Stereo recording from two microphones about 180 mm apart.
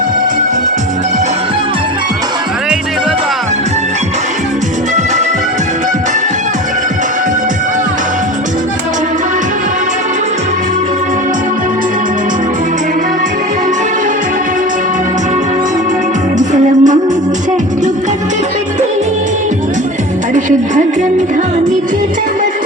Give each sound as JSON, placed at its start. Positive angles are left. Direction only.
{"t": 16.4, "sound": "music", "side_deg": -45}